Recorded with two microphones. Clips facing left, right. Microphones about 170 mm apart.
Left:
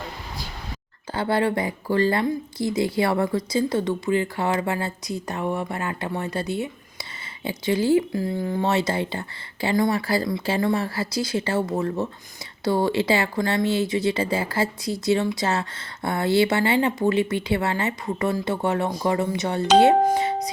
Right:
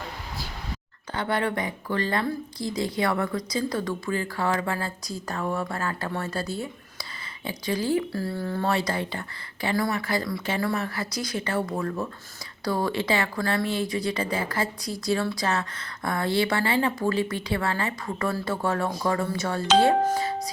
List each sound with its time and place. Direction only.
1.1 s a woman's voice: 30° left (ahead or behind)